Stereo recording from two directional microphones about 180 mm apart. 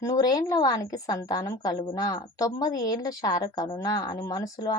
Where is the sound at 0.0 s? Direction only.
20° left (ahead or behind).